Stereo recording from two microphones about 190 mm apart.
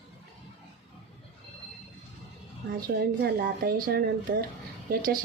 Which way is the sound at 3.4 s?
50° right (ahead or behind).